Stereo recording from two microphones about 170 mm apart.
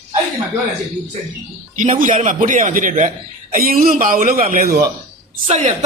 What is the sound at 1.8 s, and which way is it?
Speech, 50° right (ahead or behind).